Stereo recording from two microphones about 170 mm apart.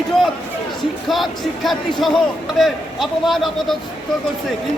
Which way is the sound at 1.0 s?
Centre (ahead or behind).